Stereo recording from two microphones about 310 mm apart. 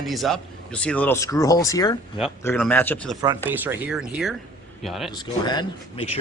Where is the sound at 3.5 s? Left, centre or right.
Centre.